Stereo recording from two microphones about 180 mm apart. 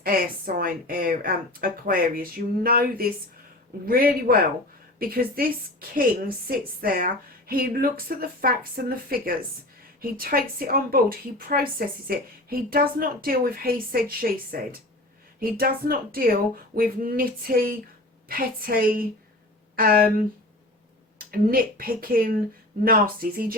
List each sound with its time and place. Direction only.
0.0 s a woman's voice: 55° right (ahead or behind)
21.2 s a woman's voice: 55° right (ahead or behind)